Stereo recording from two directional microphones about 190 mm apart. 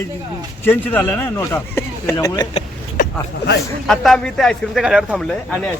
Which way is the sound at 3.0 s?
60° left (ahead or behind).